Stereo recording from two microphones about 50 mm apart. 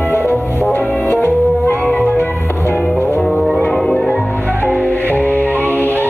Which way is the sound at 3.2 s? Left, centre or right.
Centre.